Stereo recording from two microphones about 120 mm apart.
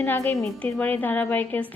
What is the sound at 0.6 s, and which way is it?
A woman's voice, 15° left (ahead or behind).